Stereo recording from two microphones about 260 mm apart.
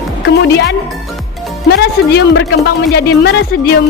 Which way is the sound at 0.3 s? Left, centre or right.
Left.